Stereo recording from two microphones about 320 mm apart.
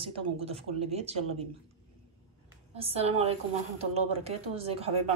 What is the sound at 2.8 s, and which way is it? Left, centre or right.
A woman's voice, centre.